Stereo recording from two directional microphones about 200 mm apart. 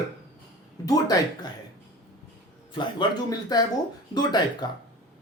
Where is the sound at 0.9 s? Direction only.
20° left (ahead or behind).